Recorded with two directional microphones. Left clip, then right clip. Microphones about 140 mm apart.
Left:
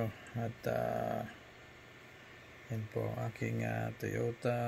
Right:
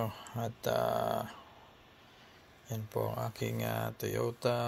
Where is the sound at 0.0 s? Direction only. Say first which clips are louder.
Right 3 dB; centre (ahead or behind).